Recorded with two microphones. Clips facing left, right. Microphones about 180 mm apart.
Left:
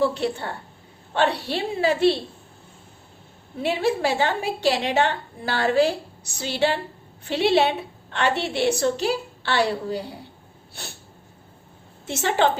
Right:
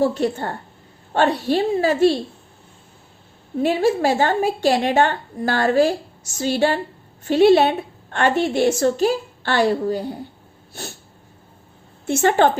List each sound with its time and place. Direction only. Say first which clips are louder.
0.0 s a woman's voice: right 3 dB; 45° right (ahead or behind)
3.6 s a woman's voice: right 5 dB; 45° right (ahead or behind)
12.0 s a woman's voice: right 5 dB; 50° right (ahead or behind)